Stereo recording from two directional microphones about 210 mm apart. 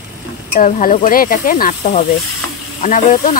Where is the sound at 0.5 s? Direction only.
40° left (ahead or behind).